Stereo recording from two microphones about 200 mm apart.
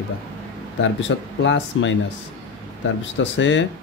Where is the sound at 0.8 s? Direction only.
65° left (ahead or behind).